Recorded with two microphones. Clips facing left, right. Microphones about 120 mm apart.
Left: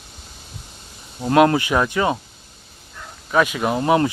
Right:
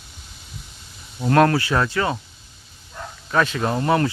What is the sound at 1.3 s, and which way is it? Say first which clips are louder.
Speech: left 2 dB; 15° left (ahead or behind).